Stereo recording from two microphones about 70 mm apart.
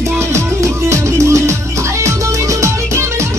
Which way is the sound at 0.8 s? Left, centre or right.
Right.